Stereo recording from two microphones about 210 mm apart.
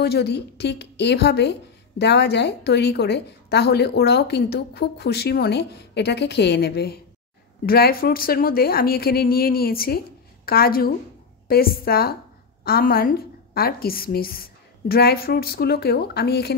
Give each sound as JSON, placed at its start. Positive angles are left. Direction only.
{"t": 0.0, "sound": "a woman's voice", "side_deg": 50}